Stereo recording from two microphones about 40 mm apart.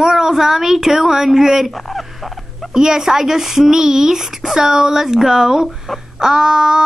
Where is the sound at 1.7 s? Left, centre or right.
Centre.